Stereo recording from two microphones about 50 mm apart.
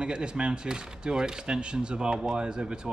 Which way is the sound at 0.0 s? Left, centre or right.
Centre.